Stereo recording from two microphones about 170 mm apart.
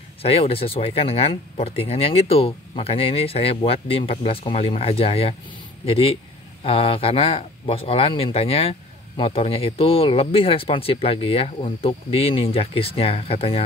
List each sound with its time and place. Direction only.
0.2 s speech: 35° left (ahead or behind)